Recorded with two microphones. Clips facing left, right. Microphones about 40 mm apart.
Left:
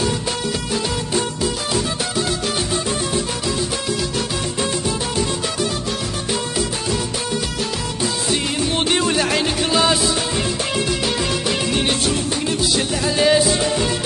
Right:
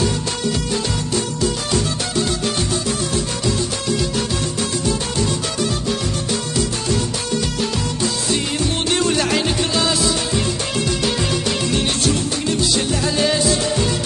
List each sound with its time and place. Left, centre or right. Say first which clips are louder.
1.1 s music: right 1 dB; centre
8.9 s music: right 2 dB; centre